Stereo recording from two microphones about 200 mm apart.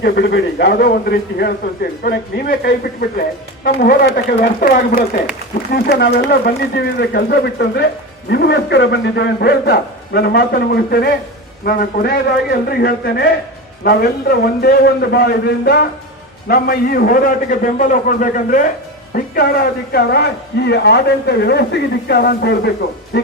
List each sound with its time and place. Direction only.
0.0 s a woman's voice: 55° left (ahead or behind)
23.1 s music: 55° left (ahead or behind)